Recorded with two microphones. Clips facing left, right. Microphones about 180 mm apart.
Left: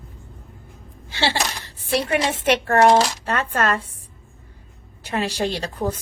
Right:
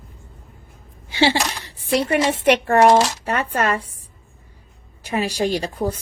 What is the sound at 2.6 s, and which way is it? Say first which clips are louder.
A woman's voice: even; 15° right (ahead or behind).